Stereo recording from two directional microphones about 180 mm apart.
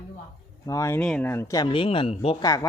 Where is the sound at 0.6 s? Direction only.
20° left (ahead or behind).